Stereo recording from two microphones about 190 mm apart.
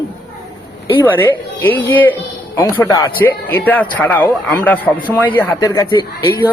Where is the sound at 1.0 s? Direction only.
10° left (ahead or behind).